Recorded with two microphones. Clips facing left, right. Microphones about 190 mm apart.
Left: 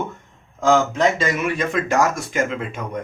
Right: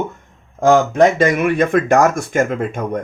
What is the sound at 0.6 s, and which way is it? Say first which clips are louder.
Speech: right 6 dB; 55° right (ahead or behind).